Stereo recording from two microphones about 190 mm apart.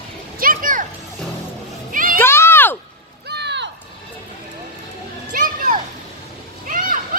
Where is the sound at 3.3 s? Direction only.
65° right (ahead or behind).